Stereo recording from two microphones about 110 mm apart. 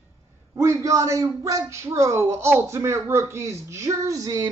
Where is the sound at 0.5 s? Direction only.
25° right (ahead or behind).